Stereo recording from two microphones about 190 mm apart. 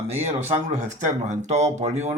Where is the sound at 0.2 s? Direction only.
35° right (ahead or behind).